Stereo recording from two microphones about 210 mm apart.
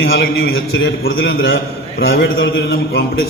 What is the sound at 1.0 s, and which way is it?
Speech, 60° left (ahead or behind).